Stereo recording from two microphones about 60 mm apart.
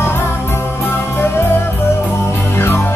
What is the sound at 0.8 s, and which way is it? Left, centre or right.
Music, left.